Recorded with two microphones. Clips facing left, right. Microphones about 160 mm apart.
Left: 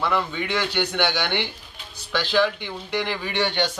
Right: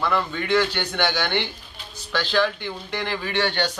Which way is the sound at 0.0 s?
15° left (ahead or behind).